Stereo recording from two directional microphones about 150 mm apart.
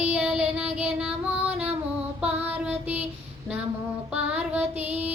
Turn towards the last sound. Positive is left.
turn(degrees=-10)  # may be behind; listen again after turning